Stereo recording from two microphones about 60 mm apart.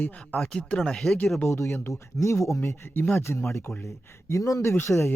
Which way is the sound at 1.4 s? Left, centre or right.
Left.